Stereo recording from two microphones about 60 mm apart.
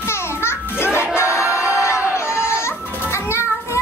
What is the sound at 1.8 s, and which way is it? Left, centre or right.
Music, left.